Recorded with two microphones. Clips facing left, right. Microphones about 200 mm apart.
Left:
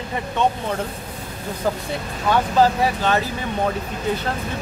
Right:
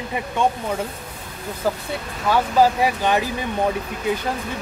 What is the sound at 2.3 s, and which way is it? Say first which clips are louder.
Speech: even; 10° right (ahead or behind).